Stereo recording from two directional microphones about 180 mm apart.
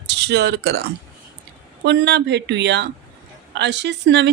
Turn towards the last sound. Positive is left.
turn(degrees=-75)  # may be behind; listen again after turning